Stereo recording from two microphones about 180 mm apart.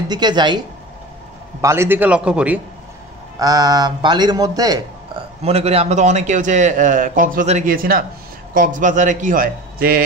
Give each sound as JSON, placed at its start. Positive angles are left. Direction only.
{"t": 0.1, "sound": "a man's voice", "side_deg": -25}
{"t": 1.6, "sound": "a man's voice", "side_deg": -15}
{"t": 3.3, "sound": "a man's voice", "side_deg": -20}
{"t": 5.4, "sound": "a man's voice", "side_deg": -35}